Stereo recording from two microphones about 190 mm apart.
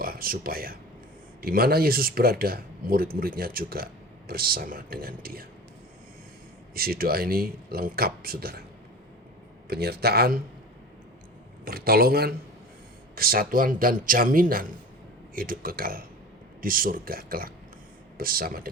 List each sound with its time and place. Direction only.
0.0 s speech: 50° right (ahead or behind)
6.7 s speech: 50° right (ahead or behind)
9.6 s speech: 55° right (ahead or behind)
11.6 s speech: 50° right (ahead or behind)